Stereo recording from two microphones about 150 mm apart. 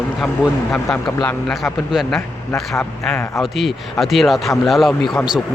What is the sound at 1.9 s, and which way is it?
Speech, centre (ahead or behind).